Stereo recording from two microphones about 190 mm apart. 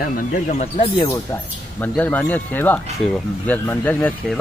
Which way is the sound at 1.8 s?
10° left (ahead or behind).